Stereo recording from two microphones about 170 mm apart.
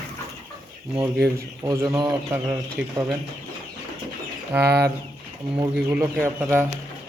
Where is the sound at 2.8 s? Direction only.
5° right (ahead or behind).